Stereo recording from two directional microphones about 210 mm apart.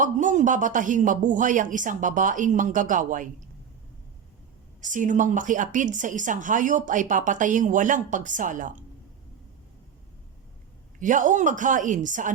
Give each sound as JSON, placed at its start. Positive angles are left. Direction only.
{"t": 0.0, "sound": "a woman's voice", "side_deg": -35}
{"t": 4.8, "sound": "a woman's voice", "side_deg": -40}
{"t": 11.0, "sound": "a woman's voice", "side_deg": -35}